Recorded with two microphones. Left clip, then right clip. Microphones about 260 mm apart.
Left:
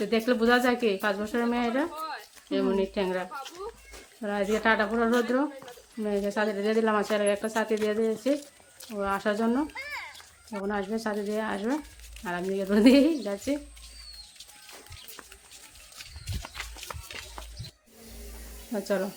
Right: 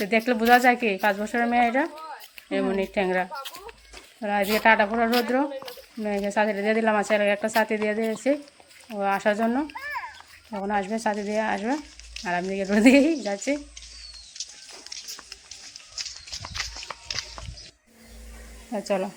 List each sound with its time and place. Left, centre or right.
0.0 s speech: centre
17.2 s a sound: right
18.7 s speech: centre